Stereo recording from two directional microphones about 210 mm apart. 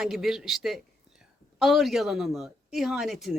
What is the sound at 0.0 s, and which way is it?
Speech, centre (ahead or behind).